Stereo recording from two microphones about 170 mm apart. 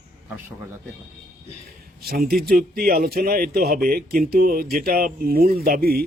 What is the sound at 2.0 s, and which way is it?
Speech, 65° right (ahead or behind).